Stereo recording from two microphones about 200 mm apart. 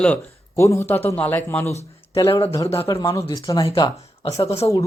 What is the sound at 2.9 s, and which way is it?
Speech, 20° left (ahead or behind).